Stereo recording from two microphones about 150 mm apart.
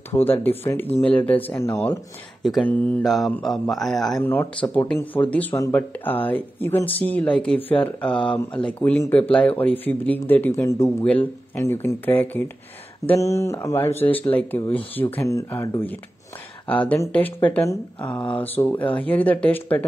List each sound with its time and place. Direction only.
0.1 s speech: 15° left (ahead or behind)
2.4 s speech: centre (ahead or behind)
4.2 s speech: 15° left (ahead or behind)
7.7 s speech: 35° left (ahead or behind)
8.5 s speech: 10° left (ahead or behind)